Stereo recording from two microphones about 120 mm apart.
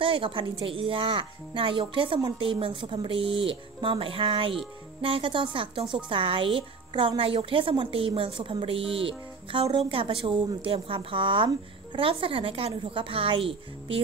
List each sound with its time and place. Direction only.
0.0 s a woman's voice: 45° right (ahead or behind)